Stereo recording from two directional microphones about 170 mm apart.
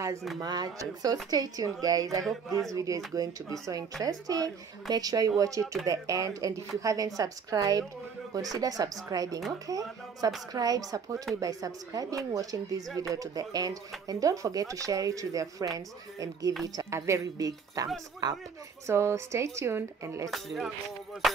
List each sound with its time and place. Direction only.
0.4 s a woman's voice: 20° right (ahead or behind)
20.2 s speech: centre (ahead or behind)